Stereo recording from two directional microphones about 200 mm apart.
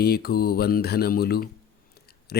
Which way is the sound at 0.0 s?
50° left (ahead or behind).